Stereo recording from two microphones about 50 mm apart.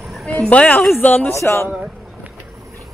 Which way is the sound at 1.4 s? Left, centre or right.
Left.